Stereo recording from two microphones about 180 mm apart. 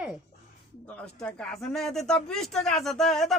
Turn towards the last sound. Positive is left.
turn(degrees=0)  # may be behind; listen again after turning